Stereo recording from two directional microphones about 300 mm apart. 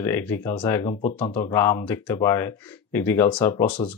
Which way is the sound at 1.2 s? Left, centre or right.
Left.